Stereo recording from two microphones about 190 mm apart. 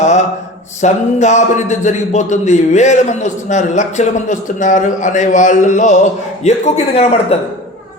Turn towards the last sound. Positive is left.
turn(degrees=35)  # may be behind; listen again after turning